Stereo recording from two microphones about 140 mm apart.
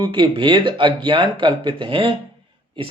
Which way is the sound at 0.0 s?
35° right (ahead or behind).